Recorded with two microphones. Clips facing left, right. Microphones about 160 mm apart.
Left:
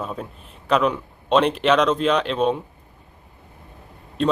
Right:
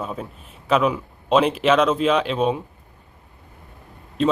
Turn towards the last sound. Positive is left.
turn(degrees=-5)  # may be behind; listen again after turning